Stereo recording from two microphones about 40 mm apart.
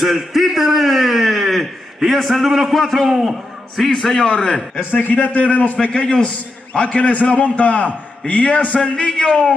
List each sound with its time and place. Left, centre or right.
0.0 s a man's voice: centre
4.9 s a man's voice: left
5.8 s a man's voice: left